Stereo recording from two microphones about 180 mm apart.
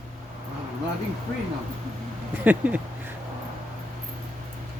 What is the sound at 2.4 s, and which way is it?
Speech, 10° right (ahead or behind).